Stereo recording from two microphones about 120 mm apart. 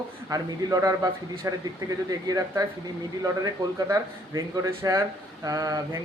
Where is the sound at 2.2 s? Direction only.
30° right (ahead or behind).